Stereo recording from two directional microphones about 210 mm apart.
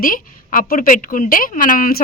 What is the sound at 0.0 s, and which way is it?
A woman's voice, 40° left (ahead or behind).